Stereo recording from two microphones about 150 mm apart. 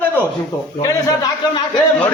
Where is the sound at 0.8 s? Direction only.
25° left (ahead or behind).